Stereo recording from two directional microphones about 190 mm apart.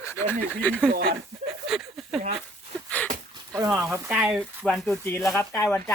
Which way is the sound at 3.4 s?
15° right (ahead or behind).